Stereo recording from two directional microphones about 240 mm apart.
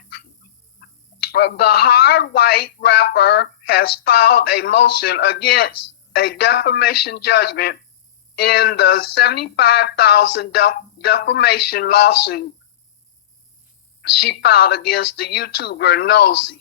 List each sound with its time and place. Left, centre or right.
1.3 s speech: left
14.2 s speech: left